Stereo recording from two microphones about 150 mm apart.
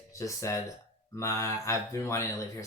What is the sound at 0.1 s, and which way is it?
Speech, 20° left (ahead or behind).